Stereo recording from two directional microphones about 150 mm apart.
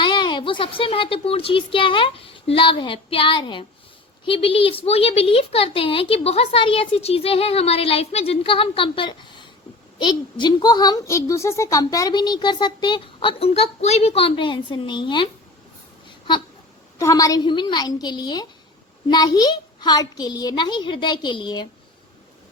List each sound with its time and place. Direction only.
0.0 s a woman's voice: 30° left (ahead or behind)
13.5 s a woman's voice: 45° left (ahead or behind)
17.0 s a woman's voice: 20° left (ahead or behind)